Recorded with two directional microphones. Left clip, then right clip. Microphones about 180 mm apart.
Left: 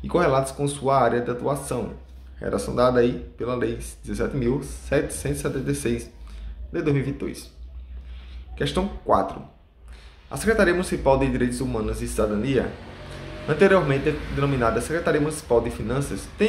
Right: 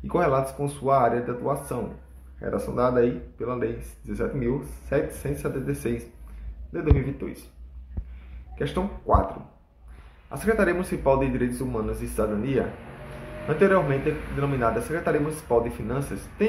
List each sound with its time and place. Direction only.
0.0 s speech: 5° left (ahead or behind)
8.5 s speech: 10° left (ahead or behind)
10.3 s speech: 10° left (ahead or behind)